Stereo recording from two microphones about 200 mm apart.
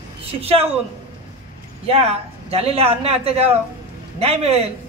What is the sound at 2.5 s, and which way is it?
A woman's voice, 30° right (ahead or behind).